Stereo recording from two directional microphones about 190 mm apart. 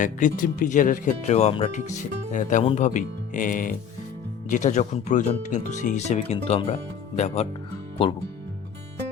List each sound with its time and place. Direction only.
0.0 s speech: 45° left (ahead or behind)